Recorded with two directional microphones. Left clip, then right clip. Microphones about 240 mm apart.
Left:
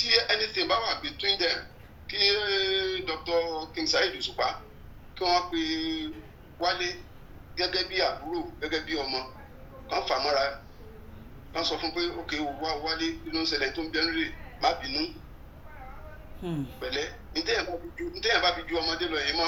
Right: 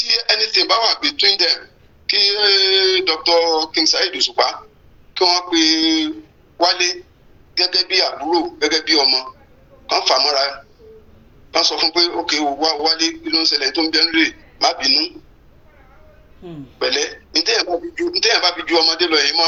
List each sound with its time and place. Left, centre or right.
0.0 s a man's voice: right
11.5 s a man's voice: right
16.8 s a man's voice: right